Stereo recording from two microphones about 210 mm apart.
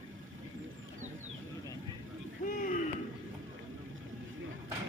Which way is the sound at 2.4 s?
40° left (ahead or behind).